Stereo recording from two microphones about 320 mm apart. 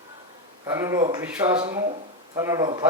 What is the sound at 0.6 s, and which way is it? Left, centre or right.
A man's voice, centre.